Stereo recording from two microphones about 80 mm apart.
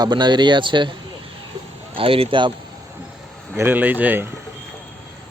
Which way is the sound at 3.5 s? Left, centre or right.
Right.